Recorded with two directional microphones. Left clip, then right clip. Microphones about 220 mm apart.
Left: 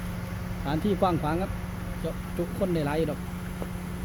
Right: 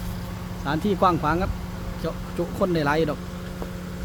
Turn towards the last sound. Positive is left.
turn(degrees=-15)  # may be behind; listen again after turning